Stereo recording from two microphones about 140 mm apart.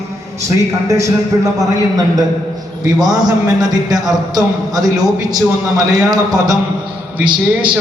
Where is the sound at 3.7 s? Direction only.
30° right (ahead or behind).